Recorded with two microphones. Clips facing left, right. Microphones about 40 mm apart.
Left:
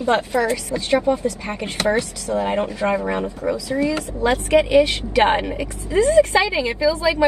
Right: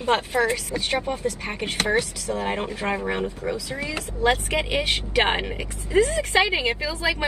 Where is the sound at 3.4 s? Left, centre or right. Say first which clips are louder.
Left 7 dB; right.